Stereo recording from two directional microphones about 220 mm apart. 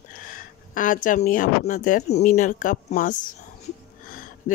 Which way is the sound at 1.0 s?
35° left (ahead or behind).